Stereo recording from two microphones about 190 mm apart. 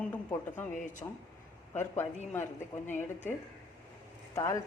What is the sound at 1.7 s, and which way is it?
Speech, 10° left (ahead or behind).